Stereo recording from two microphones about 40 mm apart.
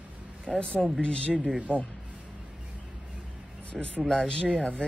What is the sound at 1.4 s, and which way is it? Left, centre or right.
Speech, right.